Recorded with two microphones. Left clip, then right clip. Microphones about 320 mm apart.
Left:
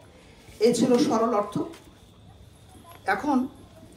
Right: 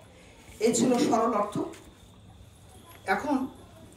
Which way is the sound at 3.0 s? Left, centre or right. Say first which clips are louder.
Left 3 dB; centre.